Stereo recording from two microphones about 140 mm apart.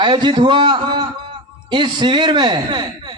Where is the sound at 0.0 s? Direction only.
30° right (ahead or behind).